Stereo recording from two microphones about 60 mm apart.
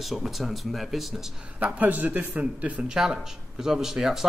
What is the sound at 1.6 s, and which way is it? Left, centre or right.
Speech, right.